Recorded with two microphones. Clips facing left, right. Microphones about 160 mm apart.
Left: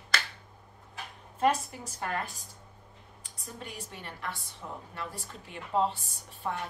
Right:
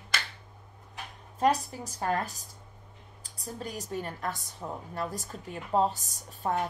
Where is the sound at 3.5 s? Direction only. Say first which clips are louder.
Right 8 dB; 40° right (ahead or behind).